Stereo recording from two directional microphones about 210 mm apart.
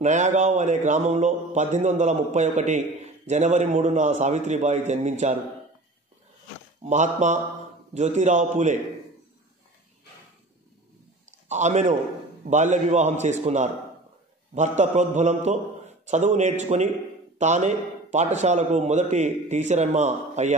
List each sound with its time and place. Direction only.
0.0 s a man's voice: 35° right (ahead or behind)
6.8 s a man's voice: 35° right (ahead or behind)
11.4 s a man's voice: 35° right (ahead or behind)